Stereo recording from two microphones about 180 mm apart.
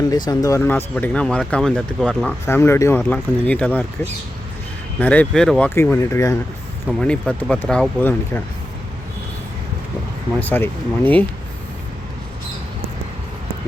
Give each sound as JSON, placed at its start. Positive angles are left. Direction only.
{"t": 0.1, "sound": "speech", "side_deg": 20}
{"t": 2.6, "sound": "speech", "side_deg": 15}
{"t": 5.7, "sound": "speech", "side_deg": 15}
{"t": 7.0, "sound": "speech", "side_deg": 5}
{"t": 10.4, "sound": "speech", "side_deg": 10}